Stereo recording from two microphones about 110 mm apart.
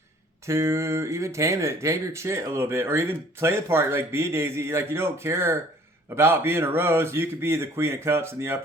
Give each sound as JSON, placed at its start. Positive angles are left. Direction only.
{"t": 0.4, "sound": "speech", "side_deg": -25}